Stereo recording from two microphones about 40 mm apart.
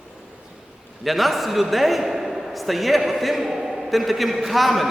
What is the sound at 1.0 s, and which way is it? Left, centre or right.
A man's voice, centre.